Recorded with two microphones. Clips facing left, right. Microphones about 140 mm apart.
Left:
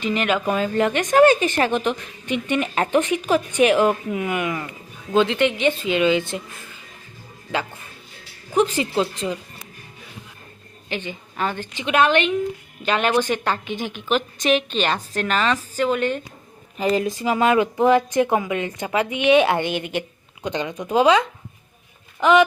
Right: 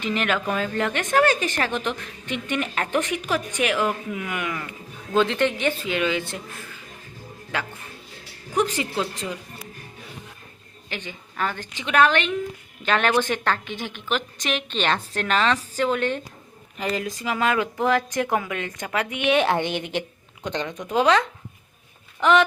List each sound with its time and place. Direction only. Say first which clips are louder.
0.0 s speech: left 3 dB; 10° left (ahead or behind)
7.5 s speech: left 4 dB; 25° left (ahead or behind)
10.8 s a woman's voice: left 5 dB; 15° left (ahead or behind)
16.7 s speech: left 6 dB; 25° left (ahead or behind)